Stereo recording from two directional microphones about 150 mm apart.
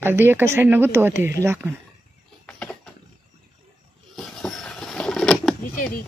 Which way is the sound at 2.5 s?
10° left (ahead or behind).